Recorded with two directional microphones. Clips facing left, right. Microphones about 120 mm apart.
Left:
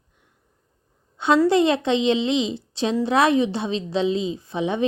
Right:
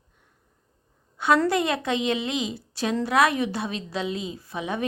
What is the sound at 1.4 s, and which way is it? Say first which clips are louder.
A woman's voice: left 6 dB; 25° left (ahead or behind).